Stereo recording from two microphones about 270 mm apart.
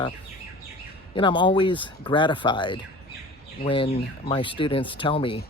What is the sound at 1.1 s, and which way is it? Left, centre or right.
Speech, centre.